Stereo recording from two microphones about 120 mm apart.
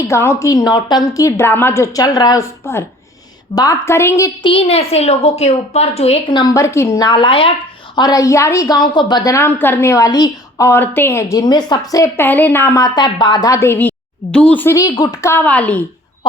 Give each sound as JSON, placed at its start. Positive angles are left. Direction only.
{"t": 0.0, "sound": "a woman's voice", "side_deg": 25}
{"t": 4.4, "sound": "a woman's voice", "side_deg": 50}
{"t": 6.3, "sound": "a woman's voice", "side_deg": 30}
{"t": 7.2, "sound": "speech", "side_deg": 45}
{"t": 7.9, "sound": "a woman's voice", "side_deg": 30}